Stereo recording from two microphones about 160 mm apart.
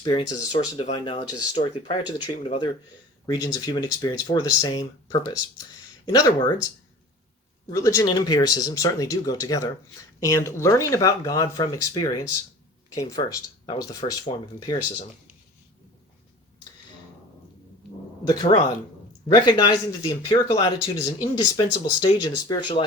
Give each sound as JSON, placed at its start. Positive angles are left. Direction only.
{"t": 0.0, "sound": "speech", "side_deg": 25}
{"t": 7.7, "sound": "speech", "side_deg": 20}
{"t": 18.3, "sound": "speech", "side_deg": 25}
{"t": 21.2, "sound": "speech", "side_deg": 25}